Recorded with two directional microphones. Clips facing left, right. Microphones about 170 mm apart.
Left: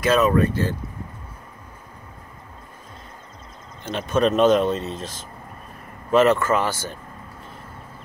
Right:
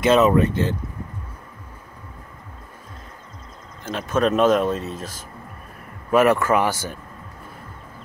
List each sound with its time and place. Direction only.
0.0 s speech: 25° right (ahead or behind)
3.8 s speech: 5° right (ahead or behind)
6.1 s speech: 10° right (ahead or behind)